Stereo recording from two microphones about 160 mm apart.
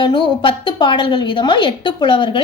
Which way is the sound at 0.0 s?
30° left (ahead or behind).